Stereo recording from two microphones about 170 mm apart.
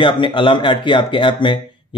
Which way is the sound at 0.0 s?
30° left (ahead or behind).